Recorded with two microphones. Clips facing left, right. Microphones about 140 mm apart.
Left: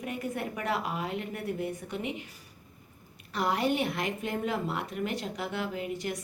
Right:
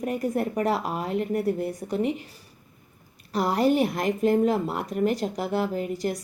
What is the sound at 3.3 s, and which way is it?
Speech, 40° right (ahead or behind).